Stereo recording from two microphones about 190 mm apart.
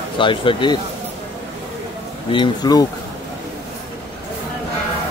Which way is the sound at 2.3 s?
25° left (ahead or behind).